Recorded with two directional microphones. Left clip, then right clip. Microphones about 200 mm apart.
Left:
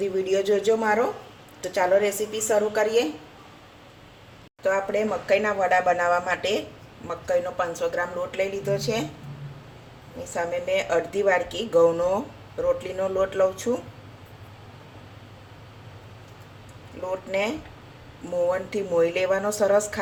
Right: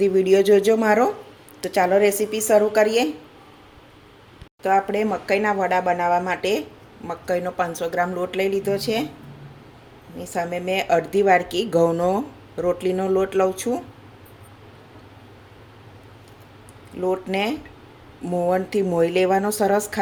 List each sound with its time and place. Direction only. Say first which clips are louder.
0.0 s a woman's voice: right 7 dB; 45° right (ahead or behind)
4.6 s a woman's voice: right 4 dB; 45° right (ahead or behind)
10.3 s a woman's voice: right 1 dB; 50° right (ahead or behind)
17.0 s a woman's voice: right 8 dB; 50° right (ahead or behind)
18.5 s speech: right 3 dB; 45° right (ahead or behind)